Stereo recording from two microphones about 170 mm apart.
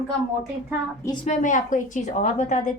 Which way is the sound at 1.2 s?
45° left (ahead or behind).